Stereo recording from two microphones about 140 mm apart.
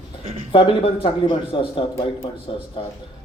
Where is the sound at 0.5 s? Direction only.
40° left (ahead or behind).